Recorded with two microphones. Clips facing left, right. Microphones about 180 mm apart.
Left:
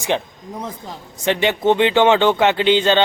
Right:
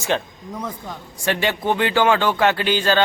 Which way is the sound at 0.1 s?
15° left (ahead or behind).